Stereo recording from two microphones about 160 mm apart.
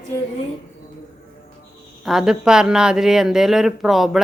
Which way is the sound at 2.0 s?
Centre (ahead or behind).